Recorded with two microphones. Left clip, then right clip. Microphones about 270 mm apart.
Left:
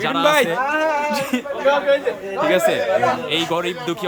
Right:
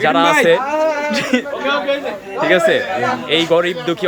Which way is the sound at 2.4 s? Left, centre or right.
Centre.